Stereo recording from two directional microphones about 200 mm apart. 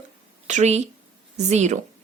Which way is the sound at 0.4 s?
35° right (ahead or behind).